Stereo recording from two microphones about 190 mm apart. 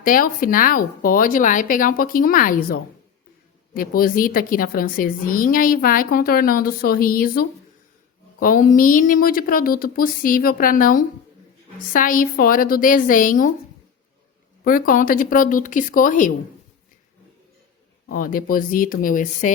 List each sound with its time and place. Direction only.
0.0 s a woman's voice: 45° left (ahead or behind)
14.6 s a woman's voice: 50° left (ahead or behind)
18.1 s a woman's voice: 45° left (ahead or behind)